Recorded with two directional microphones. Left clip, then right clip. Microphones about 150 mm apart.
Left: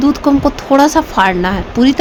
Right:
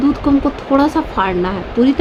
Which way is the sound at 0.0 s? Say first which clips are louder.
Left 3 dB; 55° left (ahead or behind).